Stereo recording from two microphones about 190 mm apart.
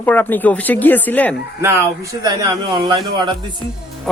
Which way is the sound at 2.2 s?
20° right (ahead or behind).